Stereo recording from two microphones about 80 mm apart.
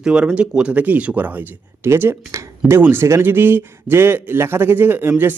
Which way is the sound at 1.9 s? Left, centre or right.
Right.